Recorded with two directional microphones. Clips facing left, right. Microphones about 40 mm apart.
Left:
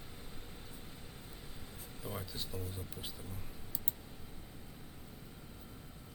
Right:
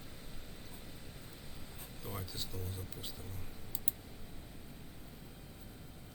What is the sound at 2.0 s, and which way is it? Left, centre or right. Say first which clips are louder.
Speech: left 1 dB; centre.